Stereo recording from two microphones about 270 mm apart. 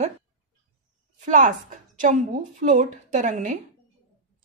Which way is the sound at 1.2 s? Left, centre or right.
Right.